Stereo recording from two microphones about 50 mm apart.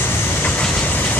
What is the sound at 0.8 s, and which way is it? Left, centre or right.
Vehicle, left.